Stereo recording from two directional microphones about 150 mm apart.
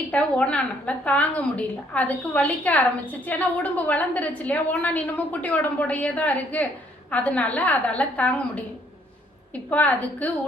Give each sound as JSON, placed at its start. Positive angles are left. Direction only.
{"t": 0.1, "sound": "a woman's voice", "side_deg": 10}
{"t": 9.6, "sound": "a woman's voice", "side_deg": 10}